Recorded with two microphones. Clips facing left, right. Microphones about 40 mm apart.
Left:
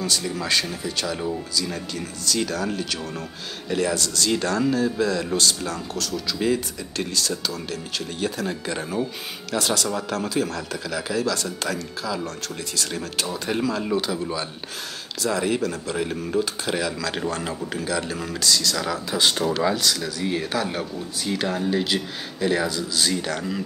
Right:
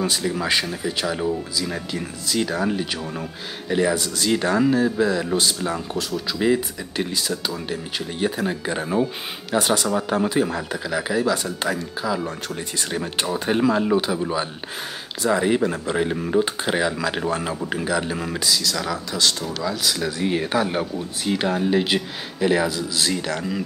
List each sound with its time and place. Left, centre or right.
0.2 s speech: centre
1.2 s speech: centre
1.7 s speech: centre
13.8 s speech: centre
17.1 s speech: centre
18.5 s speech: centre
19.3 s speech: left
20.0 s speech: right
22.5 s speech: centre